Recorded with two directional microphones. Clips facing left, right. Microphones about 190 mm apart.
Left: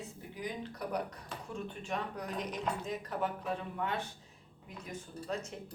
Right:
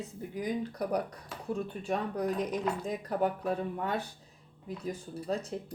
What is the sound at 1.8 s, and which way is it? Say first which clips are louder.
Speech: right 8 dB; 35° right (ahead or behind).